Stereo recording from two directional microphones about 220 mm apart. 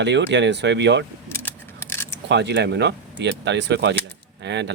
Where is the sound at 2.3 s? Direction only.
50° right (ahead or behind).